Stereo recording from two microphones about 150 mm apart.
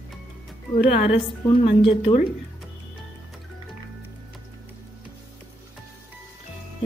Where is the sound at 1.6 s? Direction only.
40° left (ahead or behind).